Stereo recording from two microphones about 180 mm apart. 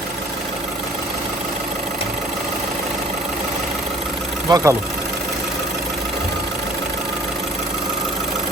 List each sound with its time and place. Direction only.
4.4 s speech: 20° right (ahead or behind)